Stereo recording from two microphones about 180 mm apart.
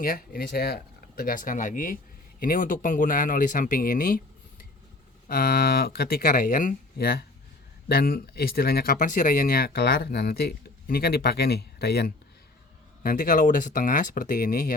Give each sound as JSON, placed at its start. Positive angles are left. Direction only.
{"t": 0.0, "sound": "speech", "side_deg": 55}
{"t": 13.0, "sound": "speech", "side_deg": 50}